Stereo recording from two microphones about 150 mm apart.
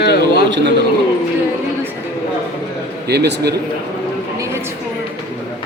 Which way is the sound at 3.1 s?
90° right.